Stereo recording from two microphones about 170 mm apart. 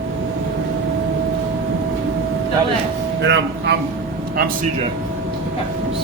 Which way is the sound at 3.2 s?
90° right.